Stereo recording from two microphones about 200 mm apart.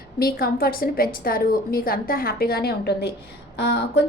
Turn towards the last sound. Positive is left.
turn(degrees=55)  # may be behind; listen again after turning